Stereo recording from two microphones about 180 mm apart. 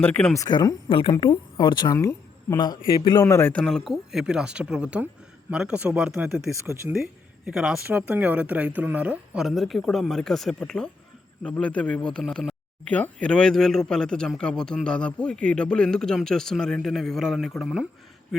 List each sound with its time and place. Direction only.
0.0 s speech: 5° left (ahead or behind)
0.3 s speech: 20° left (ahead or behind); by 17.8 s centre (ahead or behind)